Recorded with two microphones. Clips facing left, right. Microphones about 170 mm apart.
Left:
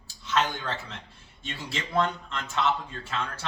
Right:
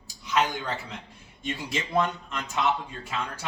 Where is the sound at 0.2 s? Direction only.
10° right (ahead or behind).